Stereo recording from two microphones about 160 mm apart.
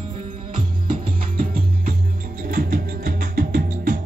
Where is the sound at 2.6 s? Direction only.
90° right.